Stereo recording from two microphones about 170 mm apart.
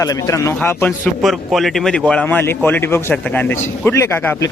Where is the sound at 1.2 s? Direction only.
Centre (ahead or behind).